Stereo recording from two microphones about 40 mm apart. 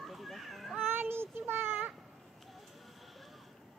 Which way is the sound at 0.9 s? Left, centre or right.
Right.